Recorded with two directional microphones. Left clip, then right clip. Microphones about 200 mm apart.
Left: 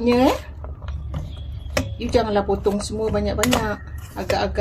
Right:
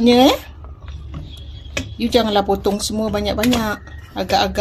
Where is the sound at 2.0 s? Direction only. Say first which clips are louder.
Right 5 dB; 30° right (ahead or behind).